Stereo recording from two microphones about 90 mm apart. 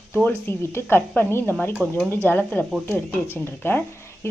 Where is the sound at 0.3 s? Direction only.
25° left (ahead or behind).